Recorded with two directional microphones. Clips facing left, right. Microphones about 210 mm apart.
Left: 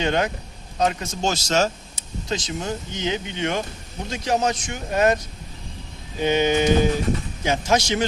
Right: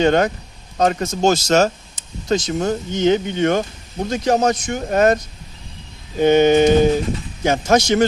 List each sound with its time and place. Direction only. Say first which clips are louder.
0.0 s speech: right 7 dB; 50° right (ahead or behind)